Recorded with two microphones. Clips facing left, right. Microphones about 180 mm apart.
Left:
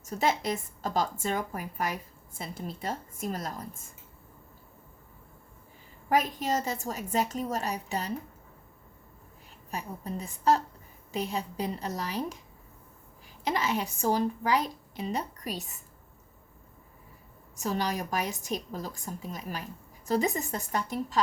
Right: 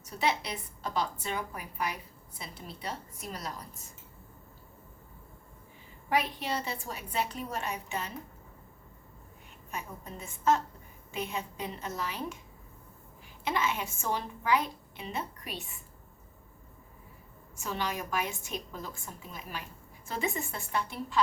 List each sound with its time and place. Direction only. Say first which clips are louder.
0.0 s a woman's voice: left 3 dB; 45° left (ahead or behind)
6.1 s a woman's voice: left 4 dB; 45° left (ahead or behind)
9.7 s a woman's voice: left 5 dB; 35° left (ahead or behind)
13.4 s a woman's voice: left 2 dB; 40° left (ahead or behind)
17.6 s a woman's voice: left 4 dB; 40° left (ahead or behind)